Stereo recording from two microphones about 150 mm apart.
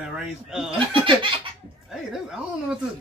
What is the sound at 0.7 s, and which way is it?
Laughter, 35° right (ahead or behind).